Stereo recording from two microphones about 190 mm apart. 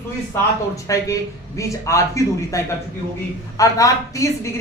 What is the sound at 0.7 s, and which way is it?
Speech, 15° left (ahead or behind).